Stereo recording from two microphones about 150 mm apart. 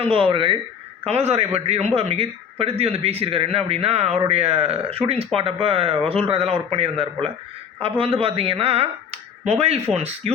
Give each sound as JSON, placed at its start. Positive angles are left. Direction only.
{"t": 0.0, "sound": "speech", "side_deg": -35}
{"t": 1.0, "sound": "a man's voice", "side_deg": -45}